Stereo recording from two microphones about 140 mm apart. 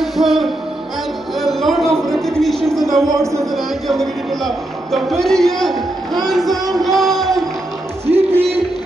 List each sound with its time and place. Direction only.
0.0 s music: centre (ahead or behind)
2.4 s speech: centre (ahead or behind)
3.1 s speech: 20° right (ahead or behind)
3.5 s speech: centre (ahead or behind)
8.1 s music: 45° right (ahead or behind)